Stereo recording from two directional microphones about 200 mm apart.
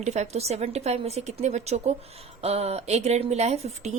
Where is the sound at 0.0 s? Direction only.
35° right (ahead or behind).